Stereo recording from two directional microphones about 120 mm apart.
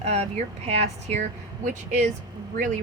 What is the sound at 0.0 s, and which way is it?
Speech, 60° right (ahead or behind).